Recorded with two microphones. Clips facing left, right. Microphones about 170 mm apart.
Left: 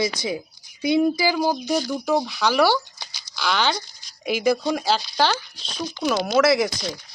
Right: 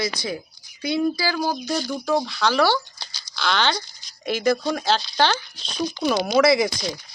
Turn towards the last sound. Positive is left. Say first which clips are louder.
# right 1 dB
turn(degrees=0)  # may be behind; listen again after turning